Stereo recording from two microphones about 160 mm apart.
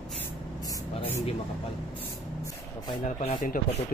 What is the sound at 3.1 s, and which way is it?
Speech, 50° left (ahead or behind).